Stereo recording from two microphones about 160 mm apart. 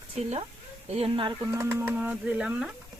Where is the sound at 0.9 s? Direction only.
40° right (ahead or behind).